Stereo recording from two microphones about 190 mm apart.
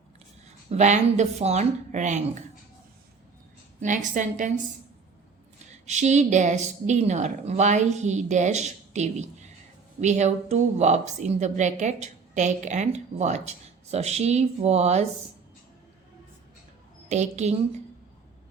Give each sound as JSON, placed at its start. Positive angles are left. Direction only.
{"t": 0.7, "sound": "a woman's voice", "side_deg": -40}
{"t": 3.8, "sound": "a woman's voice", "side_deg": -40}
{"t": 5.8, "sound": "a woman's voice", "side_deg": -40}
{"t": 17.1, "sound": "a woman's voice", "side_deg": -35}